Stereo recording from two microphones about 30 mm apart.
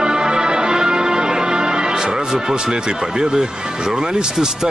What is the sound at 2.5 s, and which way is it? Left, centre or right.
Speech, right.